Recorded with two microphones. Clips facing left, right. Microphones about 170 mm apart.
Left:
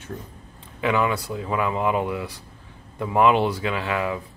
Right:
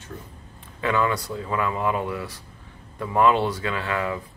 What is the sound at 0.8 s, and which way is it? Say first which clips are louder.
Speech: left 1 dB; 15° left (ahead or behind).